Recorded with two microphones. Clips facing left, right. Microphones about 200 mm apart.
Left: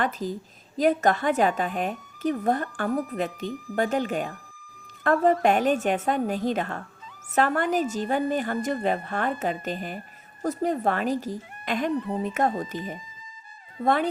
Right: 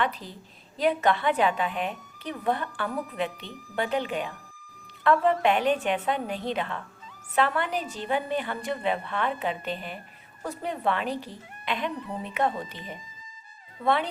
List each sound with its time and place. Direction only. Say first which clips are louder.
0.0 s speech: left 3 dB; 45° left (ahead or behind)